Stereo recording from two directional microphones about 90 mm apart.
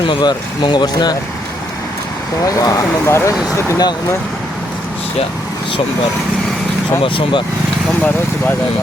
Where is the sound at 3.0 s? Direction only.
30° left (ahead or behind).